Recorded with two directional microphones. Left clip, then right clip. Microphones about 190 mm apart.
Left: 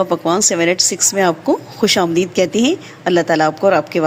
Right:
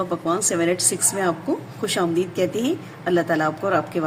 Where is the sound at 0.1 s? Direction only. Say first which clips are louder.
Left 7 dB; 40° left (ahead or behind).